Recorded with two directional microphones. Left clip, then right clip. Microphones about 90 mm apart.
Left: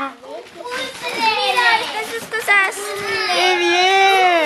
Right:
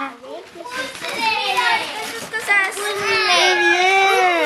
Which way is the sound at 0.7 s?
20° left (ahead or behind).